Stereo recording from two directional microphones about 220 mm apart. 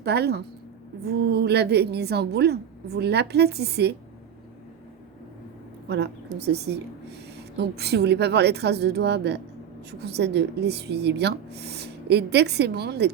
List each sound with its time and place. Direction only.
0.0 s a woman's voice: 50° right (ahead or behind)
5.9 s a woman's voice: 50° right (ahead or behind)